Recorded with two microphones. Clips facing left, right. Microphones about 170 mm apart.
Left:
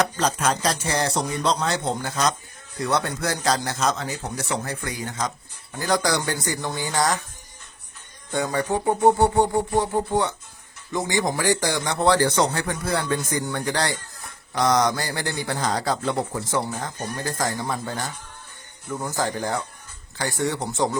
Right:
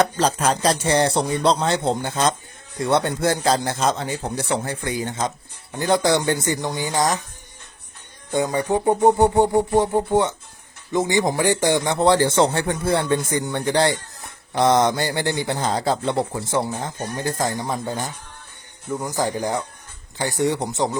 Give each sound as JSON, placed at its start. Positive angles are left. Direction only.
{"t": 0.2, "sound": "speech", "side_deg": -30}
{"t": 8.3, "sound": "music", "side_deg": -20}
{"t": 10.9, "sound": "speech", "side_deg": -20}
{"t": 18.9, "sound": "music", "side_deg": -15}
{"t": 20.1, "sound": "speech", "side_deg": -20}